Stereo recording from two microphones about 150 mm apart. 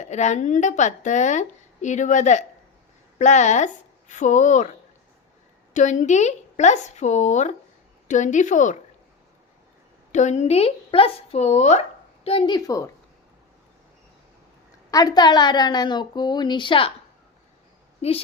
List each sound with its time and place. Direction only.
0.0 s a woman's voice: 50° left (ahead or behind)
5.7 s a woman's voice: 55° left (ahead or behind)
10.1 s a woman's voice: 55° left (ahead or behind)
12.2 s a woman's voice: 40° left (ahead or behind)
12.5 s a woman's voice: 20° left (ahead or behind)
14.8 s a woman's voice: 25° left (ahead or behind)